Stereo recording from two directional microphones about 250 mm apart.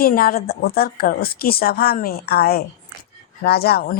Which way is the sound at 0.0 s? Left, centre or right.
Left.